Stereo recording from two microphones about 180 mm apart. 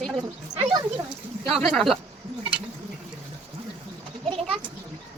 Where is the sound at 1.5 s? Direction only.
Centre (ahead or behind).